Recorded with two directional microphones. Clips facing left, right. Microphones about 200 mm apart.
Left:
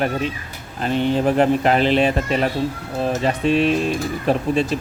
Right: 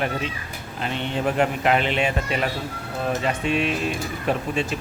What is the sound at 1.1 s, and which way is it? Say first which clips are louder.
Speech: left 5 dB; 35° left (ahead or behind).